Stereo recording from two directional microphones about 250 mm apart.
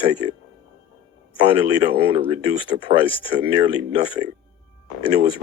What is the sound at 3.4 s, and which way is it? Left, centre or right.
Speech, centre.